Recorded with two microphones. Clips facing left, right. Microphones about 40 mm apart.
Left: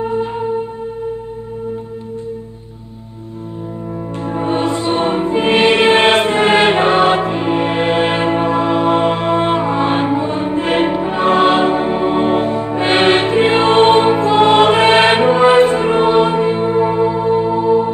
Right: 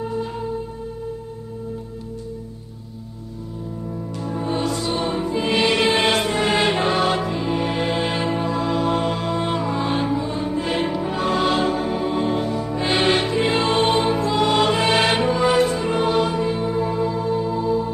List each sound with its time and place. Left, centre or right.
0.0 s music: left
4.2 s music: left